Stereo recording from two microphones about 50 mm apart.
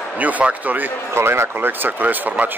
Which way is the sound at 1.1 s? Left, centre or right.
Right.